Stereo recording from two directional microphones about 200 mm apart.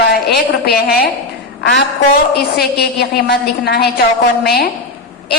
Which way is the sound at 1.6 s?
55° left (ahead or behind).